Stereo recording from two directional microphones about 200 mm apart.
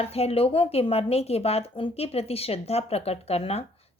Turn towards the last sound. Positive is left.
turn(degrees=30)  # may be behind; listen again after turning